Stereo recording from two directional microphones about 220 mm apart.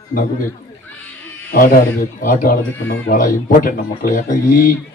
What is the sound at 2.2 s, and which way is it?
Speech, 35° left (ahead or behind).